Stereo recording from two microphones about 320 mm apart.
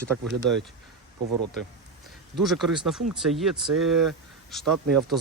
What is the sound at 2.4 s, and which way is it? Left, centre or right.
Speech, centre.